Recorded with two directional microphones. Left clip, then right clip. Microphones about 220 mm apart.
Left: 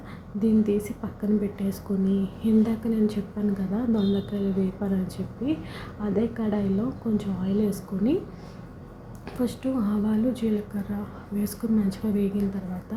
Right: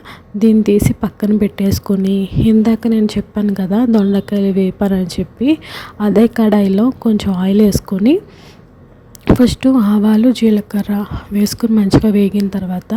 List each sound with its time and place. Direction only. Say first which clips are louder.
0.1 s a woman's voice: right 12 dB; 45° right (ahead or behind)
9.4 s a woman's voice: right 12 dB; 45° right (ahead or behind)